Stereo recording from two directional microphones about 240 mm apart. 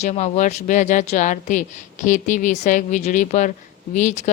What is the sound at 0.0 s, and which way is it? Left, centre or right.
A woman's voice, left.